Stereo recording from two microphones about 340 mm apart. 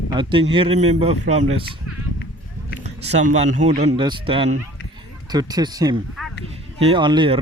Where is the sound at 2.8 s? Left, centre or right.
Centre.